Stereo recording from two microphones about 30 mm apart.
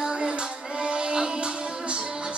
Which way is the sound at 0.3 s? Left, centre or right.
Right.